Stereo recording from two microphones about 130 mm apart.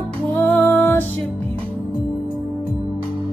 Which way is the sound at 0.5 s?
15° left (ahead or behind).